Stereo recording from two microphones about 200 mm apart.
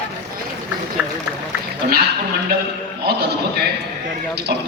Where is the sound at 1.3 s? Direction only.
10° right (ahead or behind).